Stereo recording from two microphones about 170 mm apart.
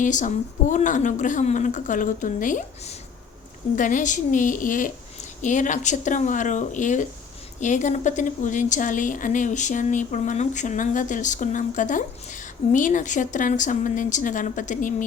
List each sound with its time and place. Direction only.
0.0 s a woman's voice: 45° left (ahead or behind)